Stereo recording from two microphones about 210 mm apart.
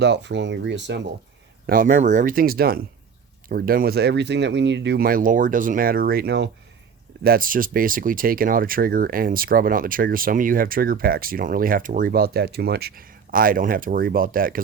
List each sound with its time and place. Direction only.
0.0 s speech: 55° right (ahead or behind)
1.6 s speech: 40° right (ahead or behind)
7.3 s speech: 40° right (ahead or behind)